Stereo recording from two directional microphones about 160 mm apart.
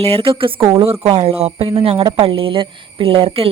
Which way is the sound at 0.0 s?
35° right (ahead or behind).